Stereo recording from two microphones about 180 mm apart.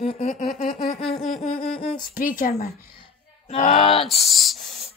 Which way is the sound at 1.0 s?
Centre (ahead or behind).